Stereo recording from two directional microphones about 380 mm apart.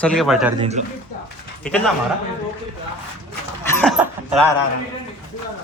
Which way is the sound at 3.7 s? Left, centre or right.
Centre.